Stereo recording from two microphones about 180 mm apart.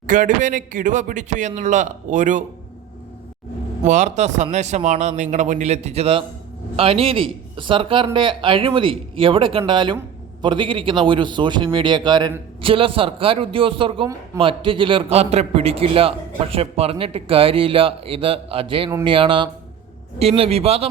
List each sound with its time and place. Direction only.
0.1 s a man's voice: 45° right (ahead or behind)
3.8 s a man's voice: 40° right (ahead or behind)